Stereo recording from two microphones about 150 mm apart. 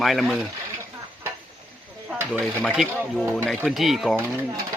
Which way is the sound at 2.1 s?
15° right (ahead or behind).